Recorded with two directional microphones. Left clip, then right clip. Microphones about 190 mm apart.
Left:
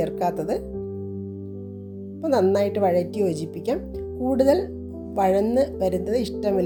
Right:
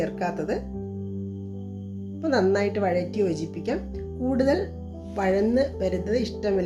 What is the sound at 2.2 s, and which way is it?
Speech, 40° left (ahead or behind).